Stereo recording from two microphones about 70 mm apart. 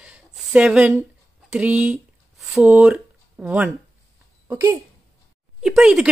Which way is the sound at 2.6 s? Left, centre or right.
Centre.